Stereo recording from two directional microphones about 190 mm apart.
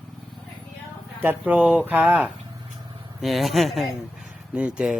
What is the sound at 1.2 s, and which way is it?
Speech, 10° right (ahead or behind).